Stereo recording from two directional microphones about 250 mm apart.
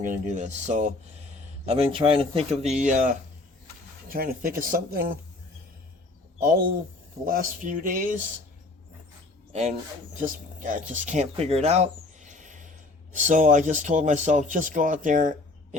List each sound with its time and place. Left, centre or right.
0.0 s speech: right
7.3 s speech: right
9.5 s speech: right